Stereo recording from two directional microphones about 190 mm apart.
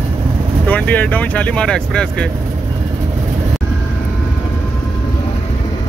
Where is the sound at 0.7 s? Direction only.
10° left (ahead or behind).